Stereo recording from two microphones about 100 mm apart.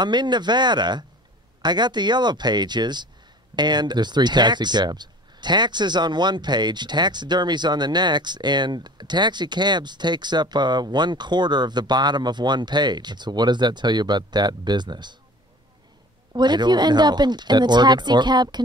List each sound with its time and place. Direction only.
0.0 s speech: 45° right (ahead or behind)
16.3 s speech: 45° right (ahead or behind)